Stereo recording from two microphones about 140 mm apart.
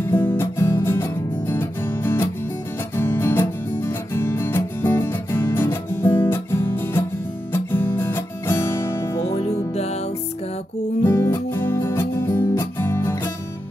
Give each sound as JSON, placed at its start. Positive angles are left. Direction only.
{"t": 0.0, "sound": "music", "side_deg": 15}
{"t": 9.3, "sound": "music", "side_deg": 50}
{"t": 11.1, "sound": "music", "side_deg": 15}